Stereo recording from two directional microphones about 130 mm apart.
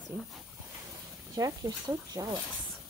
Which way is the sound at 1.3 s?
30° right (ahead or behind).